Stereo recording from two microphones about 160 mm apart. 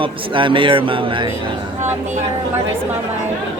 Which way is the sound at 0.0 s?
30° right (ahead or behind).